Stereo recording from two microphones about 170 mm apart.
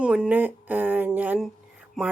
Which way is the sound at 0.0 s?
5° right (ahead or behind).